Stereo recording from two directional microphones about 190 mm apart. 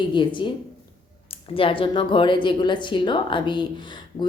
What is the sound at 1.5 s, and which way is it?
Speech, 30° left (ahead or behind).